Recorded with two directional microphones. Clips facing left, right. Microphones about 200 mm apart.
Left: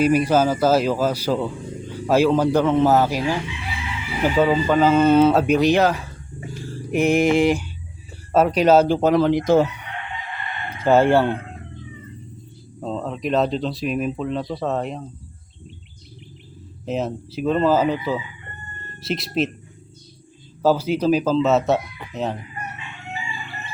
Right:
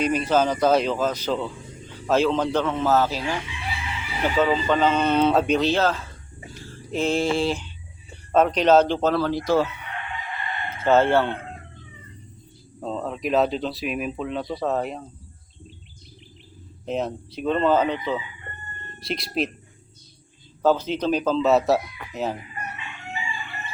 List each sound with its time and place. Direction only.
0.0 s speech: 10° left (ahead or behind)
10.7 s speech: 10° left (ahead or behind)
12.8 s speech: centre (ahead or behind)
16.8 s speech: centre (ahead or behind)
20.6 s speech: 10° left (ahead or behind)